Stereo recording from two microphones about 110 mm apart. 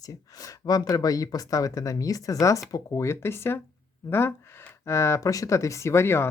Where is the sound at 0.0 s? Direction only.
30° left (ahead or behind).